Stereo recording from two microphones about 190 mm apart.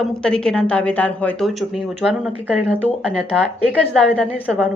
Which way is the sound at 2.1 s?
10° right (ahead or behind).